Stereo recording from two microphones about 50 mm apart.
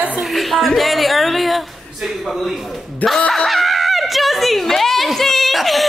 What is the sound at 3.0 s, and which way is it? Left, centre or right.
Screaming, centre.